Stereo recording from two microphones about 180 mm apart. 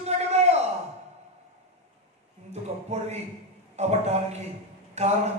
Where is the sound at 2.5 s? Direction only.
35° right (ahead or behind).